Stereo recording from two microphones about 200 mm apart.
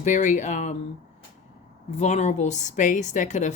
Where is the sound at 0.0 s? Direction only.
40° left (ahead or behind).